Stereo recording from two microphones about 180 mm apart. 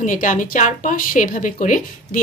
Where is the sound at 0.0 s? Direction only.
45° left (ahead or behind).